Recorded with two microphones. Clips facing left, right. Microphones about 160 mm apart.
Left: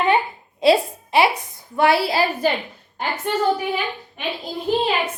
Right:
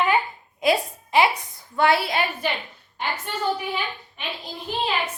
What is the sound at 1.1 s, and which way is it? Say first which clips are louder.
A woman's voice: left 2 dB; 20° left (ahead or behind).